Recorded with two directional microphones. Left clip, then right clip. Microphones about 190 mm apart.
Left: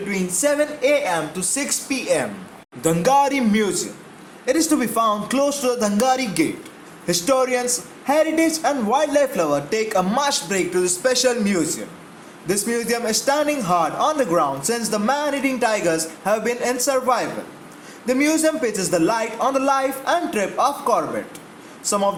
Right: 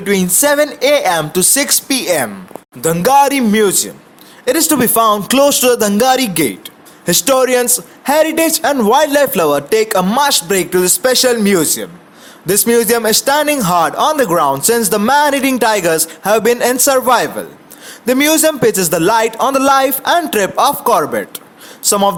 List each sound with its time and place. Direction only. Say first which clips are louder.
0.1 s a man's voice: right 9 dB; 50° right (ahead or behind)